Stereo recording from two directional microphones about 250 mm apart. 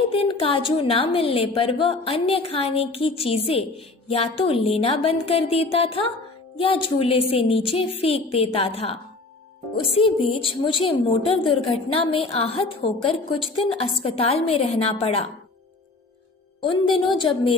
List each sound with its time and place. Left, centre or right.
0.1 s a woman's voice: left
16.7 s a woman's voice: centre